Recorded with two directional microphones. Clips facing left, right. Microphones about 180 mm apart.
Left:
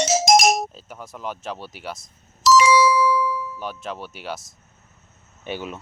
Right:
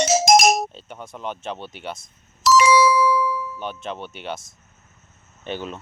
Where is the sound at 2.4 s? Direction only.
60° right (ahead or behind).